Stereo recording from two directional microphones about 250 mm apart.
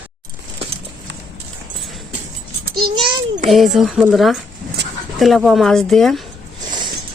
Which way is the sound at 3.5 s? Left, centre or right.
Centre.